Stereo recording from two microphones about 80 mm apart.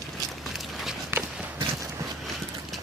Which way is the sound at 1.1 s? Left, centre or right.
Right.